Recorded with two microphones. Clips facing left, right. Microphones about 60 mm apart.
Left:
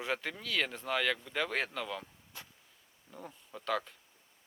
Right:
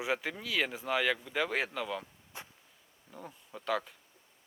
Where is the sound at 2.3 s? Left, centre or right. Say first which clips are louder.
Right 4 dB; right.